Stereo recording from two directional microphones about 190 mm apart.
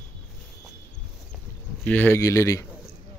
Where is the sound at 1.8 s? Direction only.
10° left (ahead or behind).